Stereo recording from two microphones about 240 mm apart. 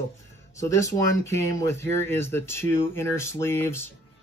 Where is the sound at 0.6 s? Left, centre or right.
Centre.